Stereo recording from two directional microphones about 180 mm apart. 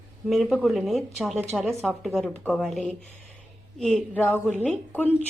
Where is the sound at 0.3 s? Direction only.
Centre (ahead or behind).